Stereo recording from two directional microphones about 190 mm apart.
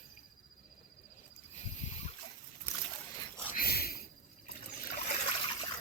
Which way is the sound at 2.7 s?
10° left (ahead or behind).